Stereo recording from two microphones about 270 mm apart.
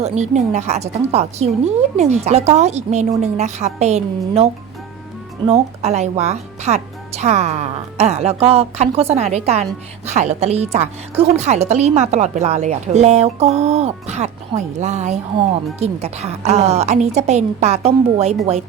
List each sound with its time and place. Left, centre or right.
0.0 s a woman's voice: right
5.5 s a woman's voice: right